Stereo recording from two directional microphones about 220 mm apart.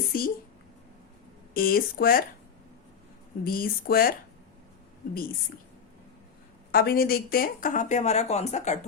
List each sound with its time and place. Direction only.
0.1 s a woman's voice: 40° left (ahead or behind)
1.5 s speech: 40° left (ahead or behind)
3.4 s speech: 40° left (ahead or behind)
6.7 s speech: 45° left (ahead or behind)